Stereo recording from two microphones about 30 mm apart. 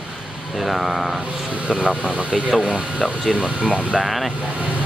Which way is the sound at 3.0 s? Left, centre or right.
Centre.